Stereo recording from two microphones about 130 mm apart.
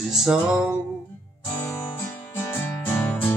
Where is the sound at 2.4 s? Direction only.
15° left (ahead or behind).